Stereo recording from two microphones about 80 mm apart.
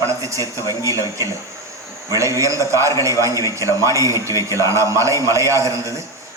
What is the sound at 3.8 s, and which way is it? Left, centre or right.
A man's voice, right.